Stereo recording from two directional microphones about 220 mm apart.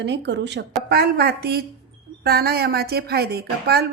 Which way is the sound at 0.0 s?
50° right (ahead or behind).